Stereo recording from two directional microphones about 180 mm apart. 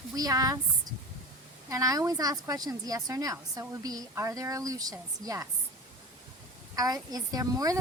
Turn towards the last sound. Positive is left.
turn(degrees=-20)  # may be behind; listen again after turning